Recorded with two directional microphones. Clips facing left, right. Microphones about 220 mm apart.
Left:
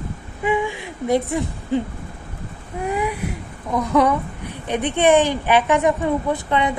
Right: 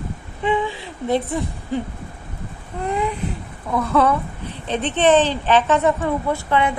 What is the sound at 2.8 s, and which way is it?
Speech, 10° left (ahead or behind).